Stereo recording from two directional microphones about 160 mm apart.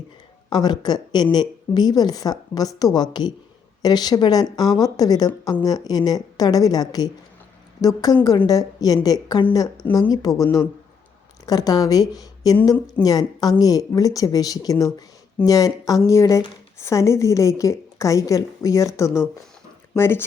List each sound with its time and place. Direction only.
0.5 s a woman's voice: 25° left (ahead or behind)